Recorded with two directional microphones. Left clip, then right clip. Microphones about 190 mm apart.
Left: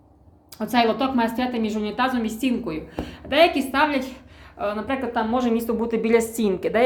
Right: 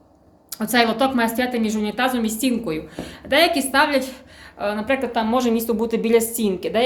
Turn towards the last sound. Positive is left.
turn(degrees=5)  # may be behind; listen again after turning